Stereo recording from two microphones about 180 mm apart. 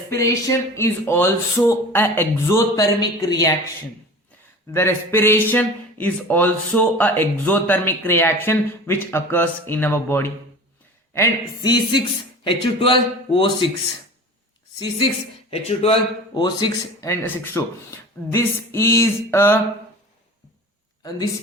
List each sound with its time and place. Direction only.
0.1 s speech: 15° left (ahead or behind)
4.7 s speech: 15° left (ahead or behind); by 13.7 s 30° left (ahead or behind)
14.8 s speech: 25° left (ahead or behind)